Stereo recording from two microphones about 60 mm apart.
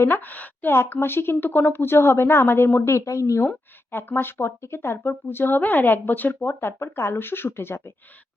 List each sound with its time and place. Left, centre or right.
0.0 s a woman's voice: left
0.7 s a woman's voice: left
3.9 s speech: left